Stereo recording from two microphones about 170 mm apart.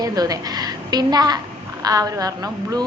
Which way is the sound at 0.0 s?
20° right (ahead or behind).